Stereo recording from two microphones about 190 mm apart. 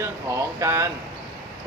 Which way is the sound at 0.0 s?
15° right (ahead or behind).